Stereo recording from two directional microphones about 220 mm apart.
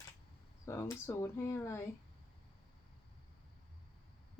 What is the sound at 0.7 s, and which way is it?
Speech, 10° left (ahead or behind).